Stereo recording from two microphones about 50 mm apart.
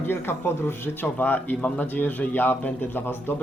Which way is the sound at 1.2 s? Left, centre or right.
Left.